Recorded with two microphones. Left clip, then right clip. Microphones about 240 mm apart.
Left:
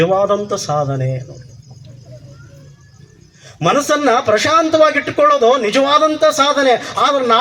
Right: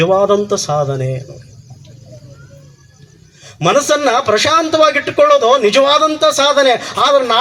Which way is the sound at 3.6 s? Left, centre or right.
Right.